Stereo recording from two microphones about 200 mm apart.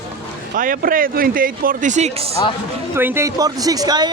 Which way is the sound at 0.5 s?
45° right (ahead or behind).